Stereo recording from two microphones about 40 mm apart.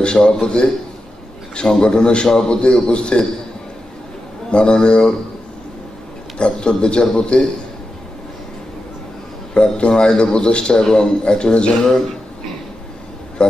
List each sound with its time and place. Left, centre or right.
0.0 s a man's voice: left
4.5 s a man's voice: left
6.3 s a man's voice: left
9.5 s a man's voice: left
13.4 s a sound: left